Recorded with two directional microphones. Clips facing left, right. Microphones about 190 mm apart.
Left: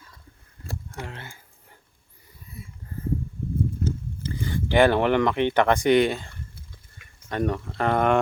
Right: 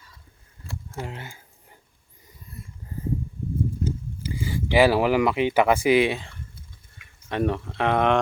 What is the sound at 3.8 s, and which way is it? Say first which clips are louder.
Speech: even; 10° right (ahead or behind).